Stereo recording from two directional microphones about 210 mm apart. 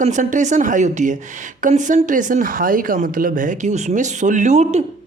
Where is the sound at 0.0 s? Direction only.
35° right (ahead or behind).